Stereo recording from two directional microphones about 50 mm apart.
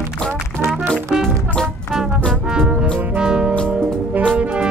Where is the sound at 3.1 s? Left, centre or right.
Centre.